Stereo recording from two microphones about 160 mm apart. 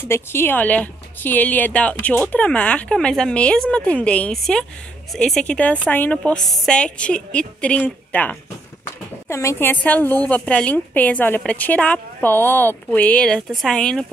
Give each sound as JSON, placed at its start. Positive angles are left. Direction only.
{"t": 0.1, "sound": "speech", "side_deg": 15}